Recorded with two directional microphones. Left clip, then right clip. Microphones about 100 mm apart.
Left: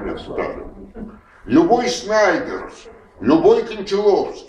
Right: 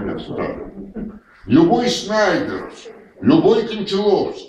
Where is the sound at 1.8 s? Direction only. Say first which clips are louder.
Left 1 dB; 30° left (ahead or behind).